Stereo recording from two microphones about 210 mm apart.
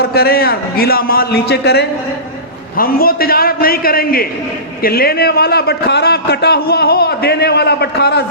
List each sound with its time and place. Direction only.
0.0 s a man's voice: 45° left (ahead or behind)